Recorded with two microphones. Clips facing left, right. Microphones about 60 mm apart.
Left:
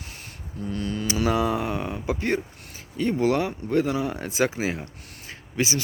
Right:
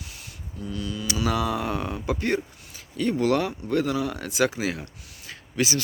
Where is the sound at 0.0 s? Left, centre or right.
Left.